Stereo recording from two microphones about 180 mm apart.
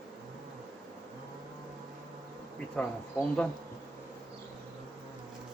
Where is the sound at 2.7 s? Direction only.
5° left (ahead or behind).